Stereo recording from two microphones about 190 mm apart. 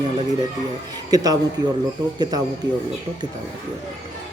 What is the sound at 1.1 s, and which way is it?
Speech, 20° right (ahead or behind).